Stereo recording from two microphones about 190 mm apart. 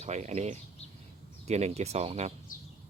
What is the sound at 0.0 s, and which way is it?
Speech, 35° right (ahead or behind).